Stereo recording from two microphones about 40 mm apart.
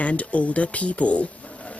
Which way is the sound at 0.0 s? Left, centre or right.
Left.